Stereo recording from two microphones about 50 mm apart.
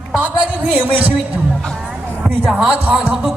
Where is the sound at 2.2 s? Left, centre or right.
Centre.